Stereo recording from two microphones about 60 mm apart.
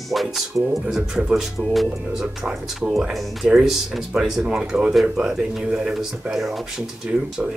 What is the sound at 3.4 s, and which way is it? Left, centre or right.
Speech, centre.